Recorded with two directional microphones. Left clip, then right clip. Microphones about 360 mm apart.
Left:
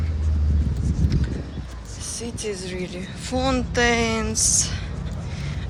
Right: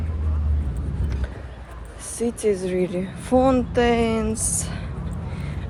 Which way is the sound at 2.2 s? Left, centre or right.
Centre.